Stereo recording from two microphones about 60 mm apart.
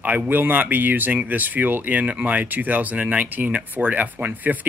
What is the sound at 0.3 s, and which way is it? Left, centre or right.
Speech, right.